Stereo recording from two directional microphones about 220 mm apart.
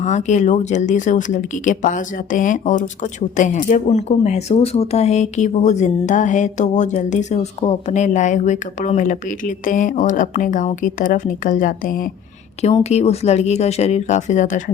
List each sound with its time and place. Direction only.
0.0 s speech: 30° left (ahead or behind)